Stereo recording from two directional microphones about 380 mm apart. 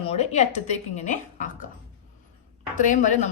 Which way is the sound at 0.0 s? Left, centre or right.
Centre.